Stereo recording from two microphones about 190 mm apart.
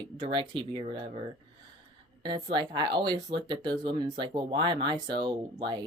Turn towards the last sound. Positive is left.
turn(degrees=-25)  # may be behind; listen again after turning